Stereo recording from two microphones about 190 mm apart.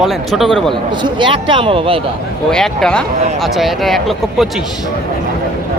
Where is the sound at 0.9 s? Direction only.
25° right (ahead or behind).